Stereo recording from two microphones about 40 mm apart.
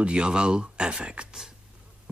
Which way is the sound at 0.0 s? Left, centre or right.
Right.